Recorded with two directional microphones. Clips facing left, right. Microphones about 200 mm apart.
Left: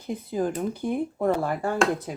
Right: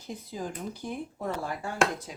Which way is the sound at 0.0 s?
55° left (ahead or behind).